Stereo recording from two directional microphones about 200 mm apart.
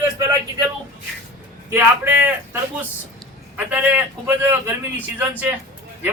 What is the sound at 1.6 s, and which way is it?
Speech, 10° right (ahead or behind).